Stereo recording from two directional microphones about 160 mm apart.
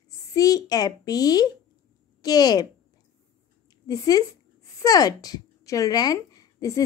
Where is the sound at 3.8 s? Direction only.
25° left (ahead or behind).